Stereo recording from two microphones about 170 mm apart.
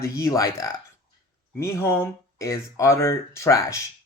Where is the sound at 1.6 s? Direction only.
15° left (ahead or behind).